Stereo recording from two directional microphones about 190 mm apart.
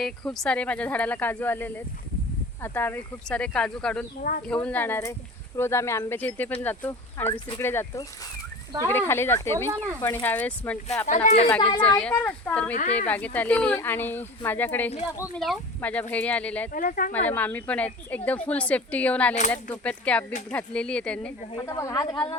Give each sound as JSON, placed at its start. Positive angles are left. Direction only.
{"t": 0.0, "sound": "speech", "side_deg": 5}
{"t": 4.2, "sound": "speech", "side_deg": 45}
{"t": 4.4, "sound": "speech", "side_deg": 5}
{"t": 11.0, "sound": "speech", "side_deg": 40}
{"t": 11.4, "sound": "speech", "side_deg": 10}
{"t": 12.7, "sound": "speech", "side_deg": 40}
{"t": 13.1, "sound": "speech", "side_deg": 10}
{"t": 16.7, "sound": "speech", "side_deg": 45}
{"t": 17.2, "sound": "speech", "side_deg": 10}
{"t": 21.5, "sound": "a woman's voice", "side_deg": 20}